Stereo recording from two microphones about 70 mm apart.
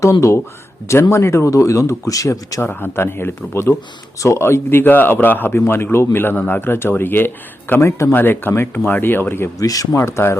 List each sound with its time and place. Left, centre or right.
0.0 s speech: left
2.6 s speech: left
7.8 s speech: left
8.1 s speech: left
9.6 s speech: left
10.0 s speech: left